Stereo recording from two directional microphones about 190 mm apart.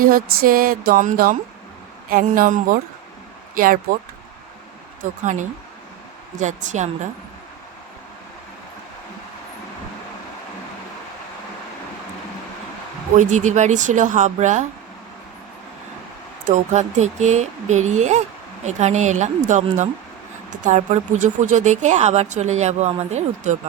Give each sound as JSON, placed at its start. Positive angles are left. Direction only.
{"t": 0.0, "sound": "a sound", "side_deg": -50}
{"t": 3.5, "sound": "speech", "side_deg": -45}
{"t": 5.2, "sound": "speech", "side_deg": -40}
{"t": 13.1, "sound": "speech", "side_deg": -40}
{"t": 16.5, "sound": "speech", "side_deg": -40}